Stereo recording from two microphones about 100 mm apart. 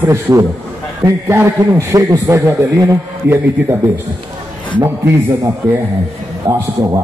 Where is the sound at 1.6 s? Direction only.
35° right (ahead or behind).